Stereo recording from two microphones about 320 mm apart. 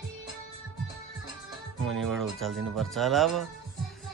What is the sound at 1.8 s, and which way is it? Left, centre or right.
Speech, centre.